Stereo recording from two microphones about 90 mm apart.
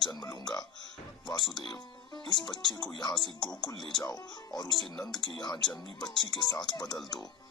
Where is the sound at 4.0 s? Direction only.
45° left (ahead or behind).